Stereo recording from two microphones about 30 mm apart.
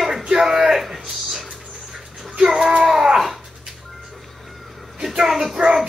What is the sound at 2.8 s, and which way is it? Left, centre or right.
Babbling, centre.